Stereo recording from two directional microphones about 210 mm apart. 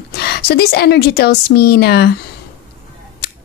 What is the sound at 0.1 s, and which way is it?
A woman's voice, 50° left (ahead or behind).